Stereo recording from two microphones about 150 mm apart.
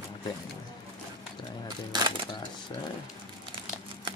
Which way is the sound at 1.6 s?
30° right (ahead or behind).